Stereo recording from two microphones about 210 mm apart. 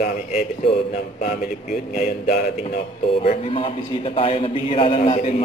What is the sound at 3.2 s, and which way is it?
A man's voice, 30° left (ahead or behind).